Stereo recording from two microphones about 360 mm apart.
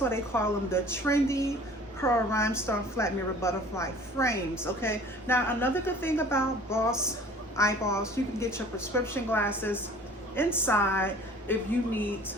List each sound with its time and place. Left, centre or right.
0.0 s a woman's voice: centre